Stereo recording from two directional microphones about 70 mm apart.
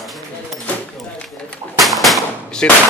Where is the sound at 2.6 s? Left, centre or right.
Centre.